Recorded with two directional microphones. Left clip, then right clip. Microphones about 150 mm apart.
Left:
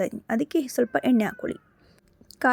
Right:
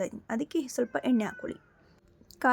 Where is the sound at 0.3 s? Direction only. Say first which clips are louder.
Left 6 dB; 30° left (ahead or behind).